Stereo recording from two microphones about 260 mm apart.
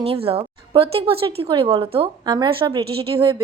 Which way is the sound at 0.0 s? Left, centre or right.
Right.